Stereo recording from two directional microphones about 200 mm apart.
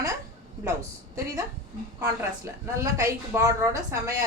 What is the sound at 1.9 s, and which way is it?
A woman's voice, 15° right (ahead or behind).